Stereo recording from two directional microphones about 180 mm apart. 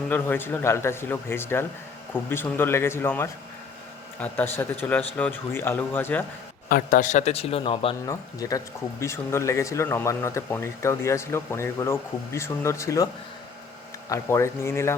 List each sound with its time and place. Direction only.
0.1 s speech: 10° left (ahead or behind)
6.7 s a man's voice: 50° left (ahead or behind); by 7.9 s 30° left (ahead or behind)
8.0 s speech: 20° left (ahead or behind)
14.1 s speech: 15° left (ahead or behind)